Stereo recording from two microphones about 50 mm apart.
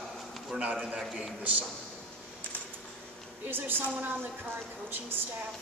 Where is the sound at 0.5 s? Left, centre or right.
Centre.